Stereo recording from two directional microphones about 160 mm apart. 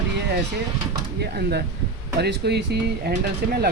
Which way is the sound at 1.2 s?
85° right.